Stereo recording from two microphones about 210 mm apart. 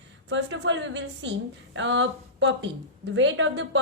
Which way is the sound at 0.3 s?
55° right (ahead or behind).